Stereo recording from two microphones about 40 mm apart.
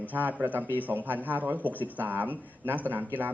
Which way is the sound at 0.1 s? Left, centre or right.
Right.